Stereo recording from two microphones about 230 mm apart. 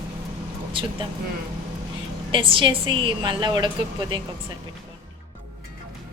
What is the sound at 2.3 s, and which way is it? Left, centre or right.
A woman's voice, right.